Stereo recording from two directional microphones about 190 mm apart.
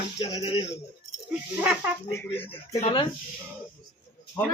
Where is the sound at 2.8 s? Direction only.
30° left (ahead or behind).